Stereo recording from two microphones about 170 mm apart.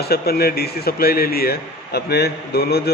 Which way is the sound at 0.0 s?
65° left (ahead or behind).